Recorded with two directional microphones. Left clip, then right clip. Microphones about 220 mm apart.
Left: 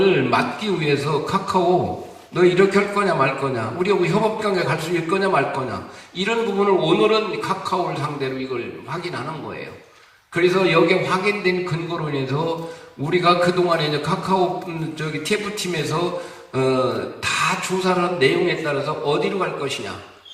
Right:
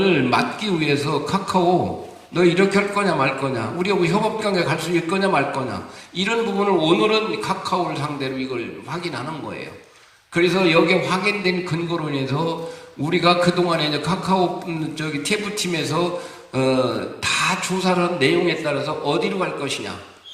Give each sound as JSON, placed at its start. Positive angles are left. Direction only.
{"t": 0.0, "sound": "a man's voice", "side_deg": -50}
{"t": 10.3, "sound": "a man's voice", "side_deg": -50}